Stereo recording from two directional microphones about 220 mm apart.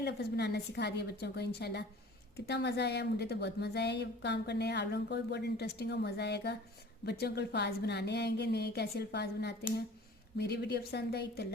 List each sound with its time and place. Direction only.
0.0 s a woman's voice: 50° left (ahead or behind)